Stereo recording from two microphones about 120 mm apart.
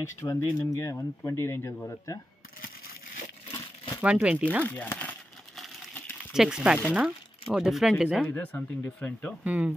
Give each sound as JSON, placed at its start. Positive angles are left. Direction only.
{"t": 0.0, "sound": "speech", "side_deg": 25}
{"t": 4.0, "sound": "speech", "side_deg": -10}
{"t": 4.6, "sound": "speech", "side_deg": 15}
{"t": 5.9, "sound": "a sound", "side_deg": 15}
{"t": 6.3, "sound": "speech", "side_deg": -5}
{"t": 8.2, "sound": "speech", "side_deg": 15}
{"t": 9.4, "sound": "speech", "side_deg": -10}